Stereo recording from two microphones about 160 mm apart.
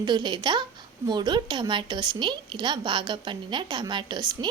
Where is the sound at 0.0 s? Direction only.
30° right (ahead or behind).